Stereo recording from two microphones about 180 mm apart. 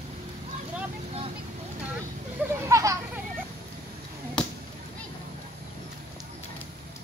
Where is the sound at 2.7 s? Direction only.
20° right (ahead or behind).